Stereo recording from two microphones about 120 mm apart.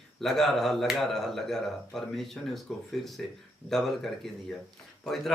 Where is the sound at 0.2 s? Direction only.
Centre (ahead or behind).